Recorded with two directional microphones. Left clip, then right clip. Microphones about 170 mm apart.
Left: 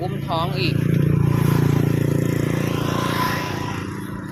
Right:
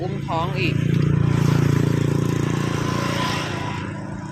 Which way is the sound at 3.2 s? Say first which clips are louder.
Left 2 dB; 25° left (ahead or behind).